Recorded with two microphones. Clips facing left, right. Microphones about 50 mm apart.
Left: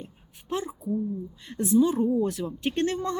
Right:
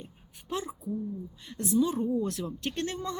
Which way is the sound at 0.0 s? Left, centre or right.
Centre.